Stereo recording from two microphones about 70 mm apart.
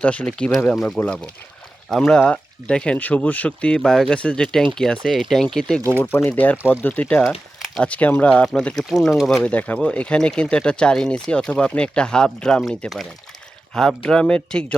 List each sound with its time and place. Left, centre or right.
0.0 s speech: centre
6.2 s speech: left; by 9.4 s centre
9.4 s speech: left